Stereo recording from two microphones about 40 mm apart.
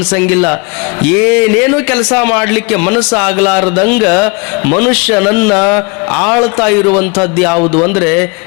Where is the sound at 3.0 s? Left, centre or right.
Centre.